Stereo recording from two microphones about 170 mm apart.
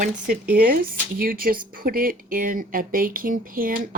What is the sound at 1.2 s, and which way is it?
Speech, 60° right (ahead or behind).